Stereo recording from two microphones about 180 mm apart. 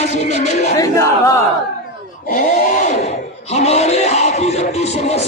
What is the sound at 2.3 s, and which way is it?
Speech, 45° left (ahead or behind).